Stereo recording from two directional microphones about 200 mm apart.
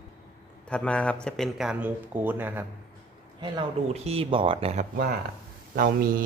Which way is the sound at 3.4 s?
30° right (ahead or behind).